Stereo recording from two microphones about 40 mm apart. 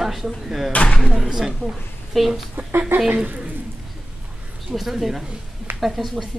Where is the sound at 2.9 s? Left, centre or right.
Right.